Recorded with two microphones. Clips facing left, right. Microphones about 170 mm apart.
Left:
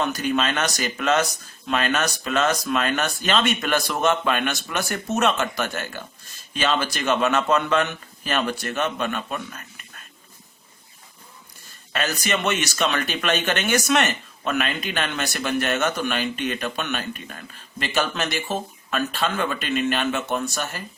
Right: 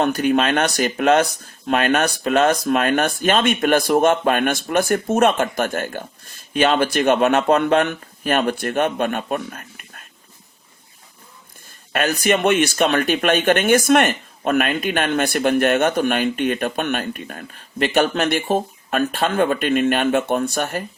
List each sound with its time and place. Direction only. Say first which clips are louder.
0.0 s speech: right 6 dB; 55° right (ahead or behind)
12.2 s speech: right 9 dB; 55° right (ahead or behind)